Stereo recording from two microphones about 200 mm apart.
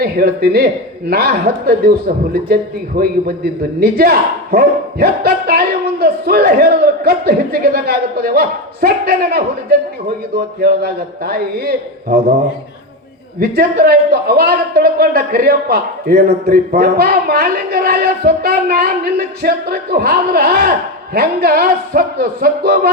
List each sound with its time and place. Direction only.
0.0 s a man's voice: 50° right (ahead or behind)
13.4 s a man's voice: 50° right (ahead or behind)